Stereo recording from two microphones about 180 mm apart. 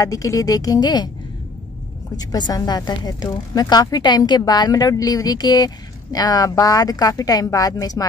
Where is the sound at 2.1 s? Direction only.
20° left (ahead or behind).